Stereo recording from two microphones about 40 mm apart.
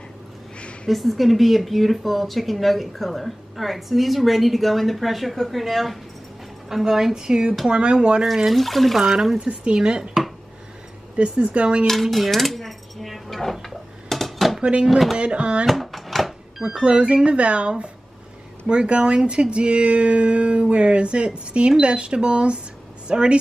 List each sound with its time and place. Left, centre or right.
0.8 s speech: centre; by 8.2 s right
8.5 s speech: centre
9.5 s speech: right
11.1 s speech: right
11.9 s dishes: centre
14.6 s speech: right
14.9 s speech: centre
15.1 s speech: right
15.6 s a sound: centre
16.6 s speech: right